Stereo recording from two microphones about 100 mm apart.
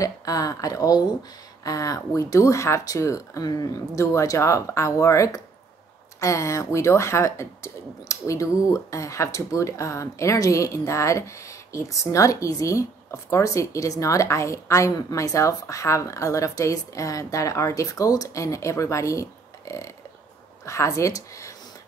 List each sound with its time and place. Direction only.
0.0 s speech: 35° left (ahead or behind)
20.6 s a woman's voice: 30° left (ahead or behind)